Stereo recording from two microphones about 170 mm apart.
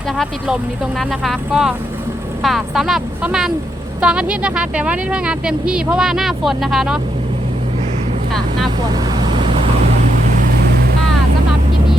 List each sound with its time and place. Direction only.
0.2 s speech: centre (ahead or behind)
8.3 s speech: 5° left (ahead or behind)
8.9 s vehicle: 25° right (ahead or behind)